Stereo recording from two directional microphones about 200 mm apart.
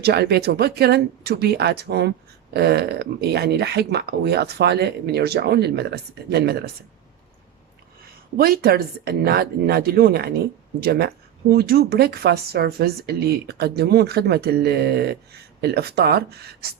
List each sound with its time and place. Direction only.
0.0 s speech: 55° right (ahead or behind)
8.4 s speech: 50° right (ahead or behind)